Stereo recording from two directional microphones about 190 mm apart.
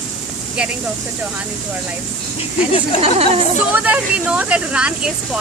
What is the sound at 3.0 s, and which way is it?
Speech, 35° right (ahead or behind).